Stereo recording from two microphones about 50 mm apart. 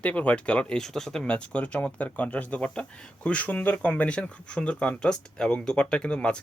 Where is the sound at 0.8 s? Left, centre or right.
Centre.